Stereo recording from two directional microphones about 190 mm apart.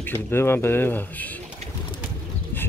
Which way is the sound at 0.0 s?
10° left (ahead or behind).